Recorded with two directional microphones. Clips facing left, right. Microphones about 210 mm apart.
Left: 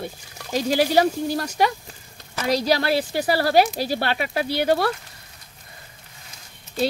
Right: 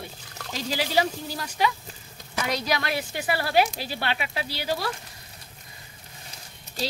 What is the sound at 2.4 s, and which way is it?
Speech, 35° left (ahead or behind).